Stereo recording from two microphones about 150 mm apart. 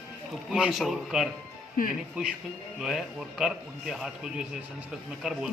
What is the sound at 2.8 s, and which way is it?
A man's voice, 5° right (ahead or behind).